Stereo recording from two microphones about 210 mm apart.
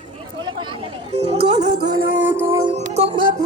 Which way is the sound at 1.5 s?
35° right (ahead or behind).